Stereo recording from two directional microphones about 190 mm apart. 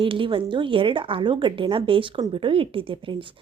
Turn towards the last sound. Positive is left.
turn(degrees=-25)  # may be behind; listen again after turning